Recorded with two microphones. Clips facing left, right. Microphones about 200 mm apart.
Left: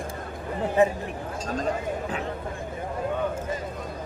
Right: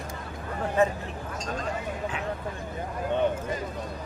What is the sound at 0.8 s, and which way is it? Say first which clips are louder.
Speech: left 3 dB; 15° left (ahead or behind).